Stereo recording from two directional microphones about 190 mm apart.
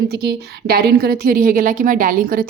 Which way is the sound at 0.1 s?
60° right (ahead or behind).